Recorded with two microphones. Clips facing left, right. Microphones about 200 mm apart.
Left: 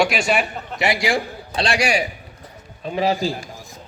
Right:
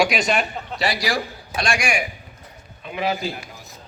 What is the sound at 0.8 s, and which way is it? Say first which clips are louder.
Speech: left 3 dB; 25° left (ahead or behind).